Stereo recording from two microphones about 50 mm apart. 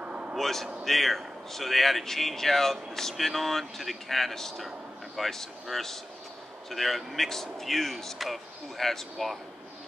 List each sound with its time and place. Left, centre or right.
0.0 s vehicle: right
0.4 s speech: centre